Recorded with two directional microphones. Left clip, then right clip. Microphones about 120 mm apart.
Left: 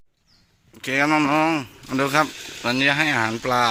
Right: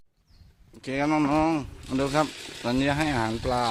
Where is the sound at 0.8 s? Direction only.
5° right (ahead or behind).